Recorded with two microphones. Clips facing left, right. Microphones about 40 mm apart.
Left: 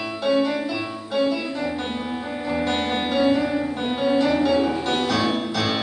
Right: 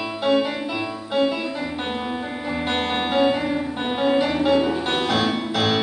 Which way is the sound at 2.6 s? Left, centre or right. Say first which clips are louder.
Right 2 dB; right.